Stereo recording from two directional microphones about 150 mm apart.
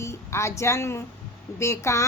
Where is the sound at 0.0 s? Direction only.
20° left (ahead or behind).